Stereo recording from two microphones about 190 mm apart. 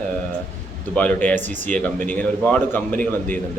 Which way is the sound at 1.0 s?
10° left (ahead or behind).